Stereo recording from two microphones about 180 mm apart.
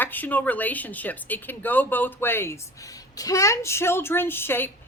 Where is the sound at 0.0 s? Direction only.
10° left (ahead or behind).